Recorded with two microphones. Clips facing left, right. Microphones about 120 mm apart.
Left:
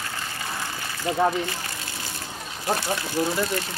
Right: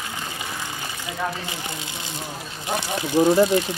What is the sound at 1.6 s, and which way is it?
Speech, 20° right (ahead or behind).